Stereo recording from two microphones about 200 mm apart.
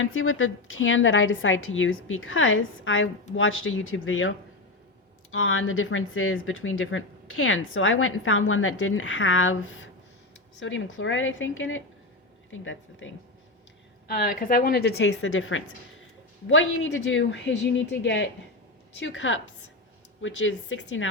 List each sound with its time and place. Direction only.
0.0 s speech: 85° left
10.6 s a woman's voice: 70° left (ahead or behind)
14.1 s a woman's voice: 45° left (ahead or behind); by 21.1 s 75° left (ahead or behind)